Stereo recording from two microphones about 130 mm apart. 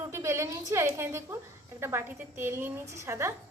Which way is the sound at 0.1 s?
20° right (ahead or behind).